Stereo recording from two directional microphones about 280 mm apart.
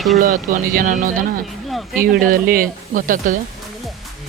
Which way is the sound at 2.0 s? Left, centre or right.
Right.